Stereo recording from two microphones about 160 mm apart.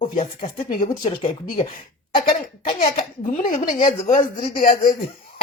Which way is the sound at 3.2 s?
55° left (ahead or behind).